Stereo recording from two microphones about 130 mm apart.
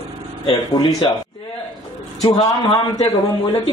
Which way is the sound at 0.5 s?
35° left (ahead or behind).